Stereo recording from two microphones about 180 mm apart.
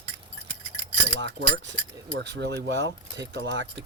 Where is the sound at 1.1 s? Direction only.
80° right.